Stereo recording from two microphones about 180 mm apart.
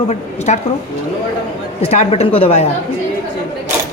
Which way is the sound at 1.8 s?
35° left (ahead or behind).